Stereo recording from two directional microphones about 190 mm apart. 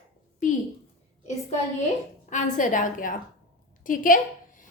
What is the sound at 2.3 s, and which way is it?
A woman's voice, 40° left (ahead or behind).